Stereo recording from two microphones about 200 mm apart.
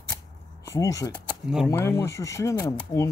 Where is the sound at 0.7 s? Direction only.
15° left (ahead or behind).